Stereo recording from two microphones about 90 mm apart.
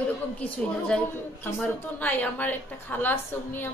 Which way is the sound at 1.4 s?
20° left (ahead or behind).